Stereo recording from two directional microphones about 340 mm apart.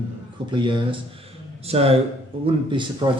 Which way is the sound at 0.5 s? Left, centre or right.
Centre.